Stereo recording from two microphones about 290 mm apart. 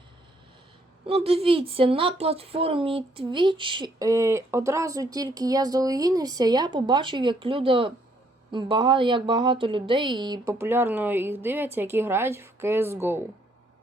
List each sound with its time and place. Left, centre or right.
1.0 s speech: centre